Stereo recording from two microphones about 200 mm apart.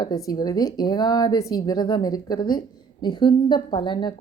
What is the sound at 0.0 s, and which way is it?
A woman's voice, 20° left (ahead or behind).